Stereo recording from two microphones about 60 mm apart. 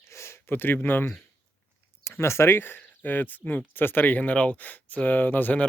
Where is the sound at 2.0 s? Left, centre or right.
Left.